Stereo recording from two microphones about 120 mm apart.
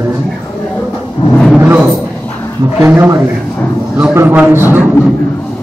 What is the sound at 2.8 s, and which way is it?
A man's voice, 15° right (ahead or behind).